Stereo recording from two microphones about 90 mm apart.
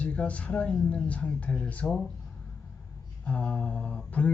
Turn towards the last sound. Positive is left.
turn(degrees=15)  # may be behind; listen again after turning